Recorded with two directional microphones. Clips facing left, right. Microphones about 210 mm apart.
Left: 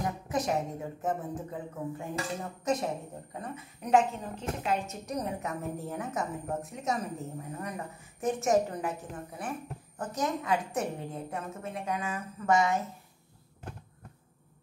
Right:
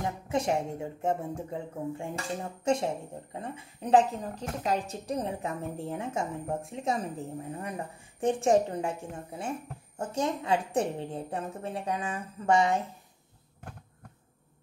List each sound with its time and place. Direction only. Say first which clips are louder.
0.3 s a woman's voice: right 3 dB; 30° right (ahead or behind)